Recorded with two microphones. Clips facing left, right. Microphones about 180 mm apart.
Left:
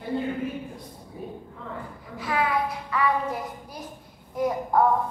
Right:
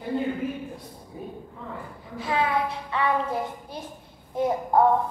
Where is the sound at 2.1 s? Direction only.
25° right (ahead or behind).